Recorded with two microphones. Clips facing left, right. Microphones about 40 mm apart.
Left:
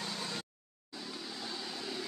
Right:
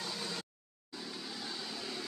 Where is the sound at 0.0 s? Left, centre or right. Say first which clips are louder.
Left 1 dB; centre.